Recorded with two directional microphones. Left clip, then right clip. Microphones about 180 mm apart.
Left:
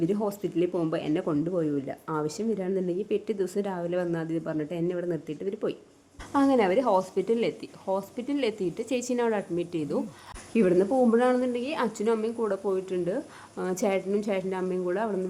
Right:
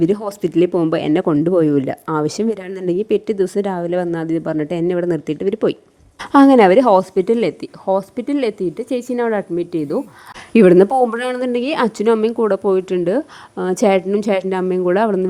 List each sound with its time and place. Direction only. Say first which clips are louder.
0.0 s a woman's voice: right 10 dB; 45° right (ahead or behind)
10.5 s speech: right 13 dB; 55° right (ahead or behind)